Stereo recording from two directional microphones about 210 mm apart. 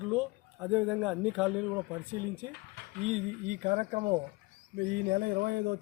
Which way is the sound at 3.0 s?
30° right (ahead or behind).